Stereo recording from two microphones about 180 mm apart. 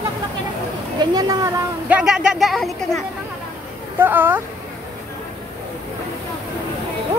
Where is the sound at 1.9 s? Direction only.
5° right (ahead or behind).